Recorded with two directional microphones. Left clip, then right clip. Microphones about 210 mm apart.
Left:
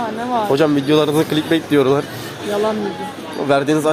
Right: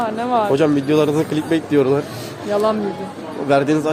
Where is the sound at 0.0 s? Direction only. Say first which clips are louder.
Right 2 dB; 15° right (ahead or behind).